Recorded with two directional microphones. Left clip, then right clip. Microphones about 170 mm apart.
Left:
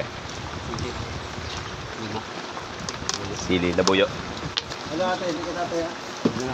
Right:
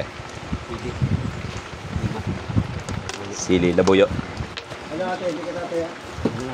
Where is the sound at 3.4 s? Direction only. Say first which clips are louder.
Right 4 dB; 50° right (ahead or behind).